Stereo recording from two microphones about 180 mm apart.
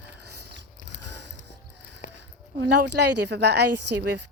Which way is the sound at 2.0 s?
45° left (ahead or behind).